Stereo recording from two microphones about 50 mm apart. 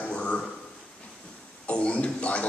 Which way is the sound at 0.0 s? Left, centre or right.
Left.